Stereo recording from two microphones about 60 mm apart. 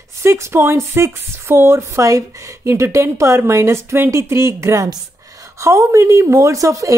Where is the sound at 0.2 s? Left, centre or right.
Right.